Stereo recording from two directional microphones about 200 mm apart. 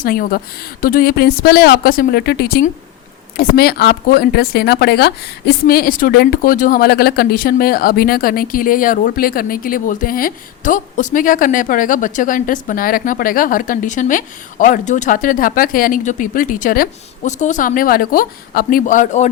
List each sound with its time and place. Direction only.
0.0 s speech: 45° left (ahead or behind)